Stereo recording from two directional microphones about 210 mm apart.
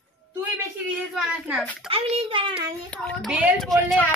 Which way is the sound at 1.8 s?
25° right (ahead or behind).